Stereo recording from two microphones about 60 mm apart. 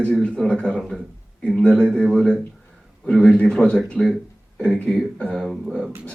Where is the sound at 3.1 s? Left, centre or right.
Centre.